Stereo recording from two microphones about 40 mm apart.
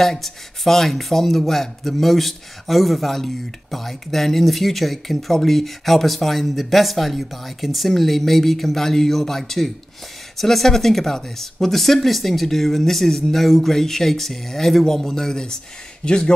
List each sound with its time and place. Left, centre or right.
0.0 s speech: centre
16.1 s a man's voice: left